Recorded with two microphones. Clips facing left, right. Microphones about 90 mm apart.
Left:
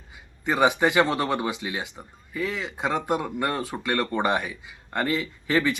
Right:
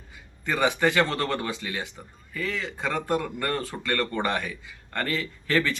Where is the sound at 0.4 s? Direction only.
20° left (ahead or behind).